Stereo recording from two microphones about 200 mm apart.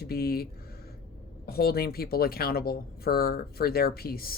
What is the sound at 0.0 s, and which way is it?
Speech, 50° left (ahead or behind).